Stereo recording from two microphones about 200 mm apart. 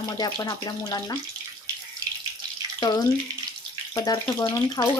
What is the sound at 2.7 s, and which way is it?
Speech, 20° left (ahead or behind).